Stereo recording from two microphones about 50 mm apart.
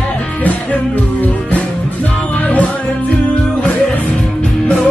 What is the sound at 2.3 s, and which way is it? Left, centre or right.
Music, left.